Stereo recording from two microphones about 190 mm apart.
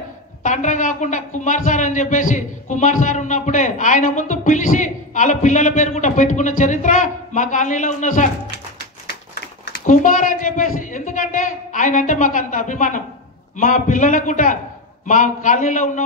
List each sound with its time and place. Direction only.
0.4 s a woman's voice: 40° left (ahead or behind)
9.8 s a woman's voice: 45° left (ahead or behind)